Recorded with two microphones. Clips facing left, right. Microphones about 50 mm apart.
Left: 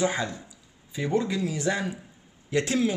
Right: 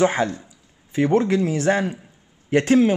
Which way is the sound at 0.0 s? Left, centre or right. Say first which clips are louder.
Right 7 dB; right.